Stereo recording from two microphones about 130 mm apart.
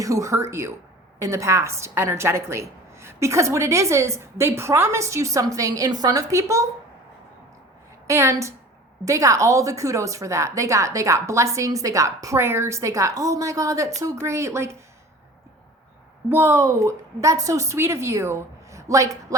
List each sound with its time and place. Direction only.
0.0 s a woman's voice: 25° right (ahead or behind)
8.0 s a woman's voice: 20° right (ahead or behind)
16.3 s a woman's voice: 20° right (ahead or behind)